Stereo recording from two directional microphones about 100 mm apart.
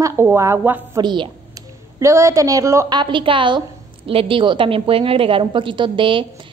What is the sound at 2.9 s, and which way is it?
Speech, 50° right (ahead or behind).